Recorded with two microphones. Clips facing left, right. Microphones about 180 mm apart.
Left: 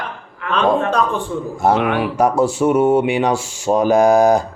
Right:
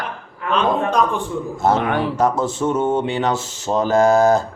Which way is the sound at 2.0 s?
15° left (ahead or behind).